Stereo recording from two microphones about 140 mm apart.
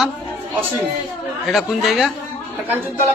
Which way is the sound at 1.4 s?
Centre (ahead or behind).